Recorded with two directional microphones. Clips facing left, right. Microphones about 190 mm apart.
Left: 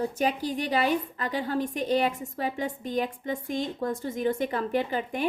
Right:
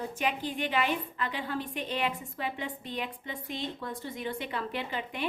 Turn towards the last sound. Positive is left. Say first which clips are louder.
# left 6 dB
turn(degrees=45)  # may be behind; listen again after turning